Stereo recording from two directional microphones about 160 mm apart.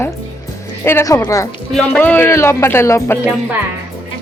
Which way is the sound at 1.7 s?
5° left (ahead or behind).